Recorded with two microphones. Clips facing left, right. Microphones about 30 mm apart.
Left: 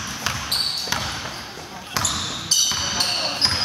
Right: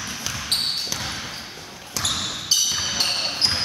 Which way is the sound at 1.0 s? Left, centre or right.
Centre.